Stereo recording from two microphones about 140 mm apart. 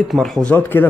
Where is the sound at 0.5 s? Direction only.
15° left (ahead or behind).